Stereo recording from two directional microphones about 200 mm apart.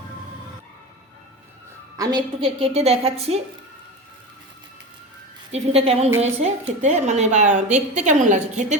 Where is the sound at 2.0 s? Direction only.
20° right (ahead or behind).